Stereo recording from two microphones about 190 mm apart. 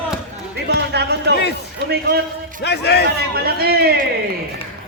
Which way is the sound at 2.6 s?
60° left (ahead or behind).